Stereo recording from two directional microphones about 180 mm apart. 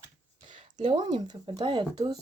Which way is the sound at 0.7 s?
25° right (ahead or behind).